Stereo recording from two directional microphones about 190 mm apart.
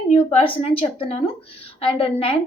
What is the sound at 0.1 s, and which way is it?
A woman's voice, 35° left (ahead or behind).